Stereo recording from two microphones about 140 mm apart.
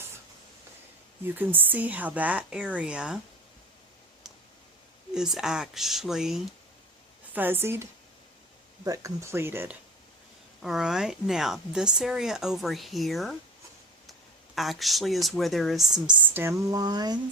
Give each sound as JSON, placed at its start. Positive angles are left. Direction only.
{"t": 1.4, "sound": "a woman's voice", "side_deg": -15}
{"t": 5.1, "sound": "speech", "side_deg": -5}
{"t": 7.3, "sound": "a woman's voice", "side_deg": -15}
{"t": 10.6, "sound": "speech", "side_deg": -5}